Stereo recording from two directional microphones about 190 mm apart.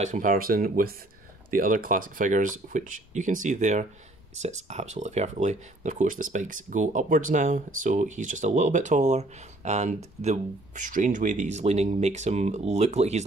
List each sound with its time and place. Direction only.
0.0 s speech: 40° right (ahead or behind)